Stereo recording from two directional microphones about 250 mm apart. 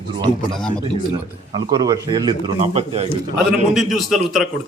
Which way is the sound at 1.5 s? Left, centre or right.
Centre.